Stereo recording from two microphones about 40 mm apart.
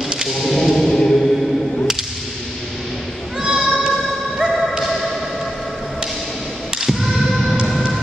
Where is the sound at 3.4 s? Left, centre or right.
Centre.